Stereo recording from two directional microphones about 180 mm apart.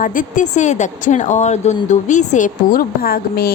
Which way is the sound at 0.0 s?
50° left (ahead or behind).